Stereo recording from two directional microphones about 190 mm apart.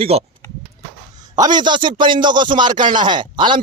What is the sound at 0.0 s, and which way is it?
Speech, 30° right (ahead or behind).